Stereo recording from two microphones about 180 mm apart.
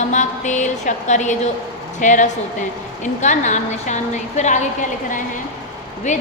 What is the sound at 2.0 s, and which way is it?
Music, 45° left (ahead or behind).